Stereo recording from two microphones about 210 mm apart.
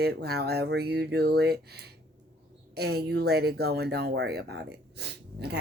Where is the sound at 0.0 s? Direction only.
50° right (ahead or behind).